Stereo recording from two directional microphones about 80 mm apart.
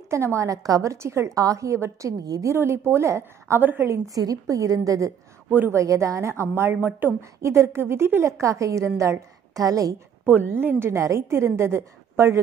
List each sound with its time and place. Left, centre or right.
0.1 s a woman's voice: right
2.5 s a woman's voice: right
4.1 s a woman's voice: right
5.5 s speech: right
5.8 s a woman's voice: right
10.2 s a woman's voice: right